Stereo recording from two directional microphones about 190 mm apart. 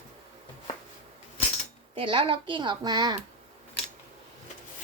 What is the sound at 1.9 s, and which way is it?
A woman's voice, 30° right (ahead or behind).